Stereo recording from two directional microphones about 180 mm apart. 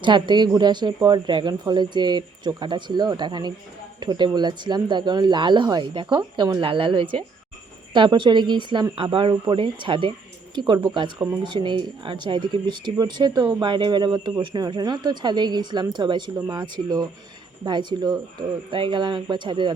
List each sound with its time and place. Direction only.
0.0 s speech: 25° right (ahead or behind)